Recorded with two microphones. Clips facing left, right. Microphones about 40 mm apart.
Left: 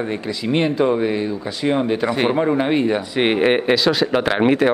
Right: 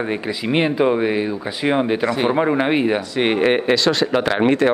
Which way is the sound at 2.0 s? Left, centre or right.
Centre.